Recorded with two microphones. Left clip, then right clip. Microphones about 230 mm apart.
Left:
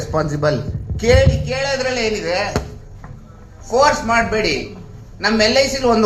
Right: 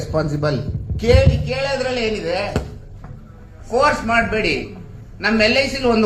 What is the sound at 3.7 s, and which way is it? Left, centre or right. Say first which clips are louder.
A man's voice: left 2 dB; left.